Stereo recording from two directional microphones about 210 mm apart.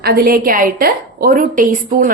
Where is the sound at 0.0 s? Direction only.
50° right (ahead or behind).